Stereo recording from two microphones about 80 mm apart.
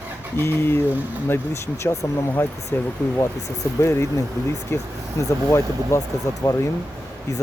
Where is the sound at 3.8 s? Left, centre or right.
Left.